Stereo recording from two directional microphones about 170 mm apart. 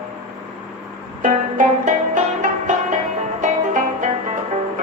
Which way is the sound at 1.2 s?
50° right (ahead or behind).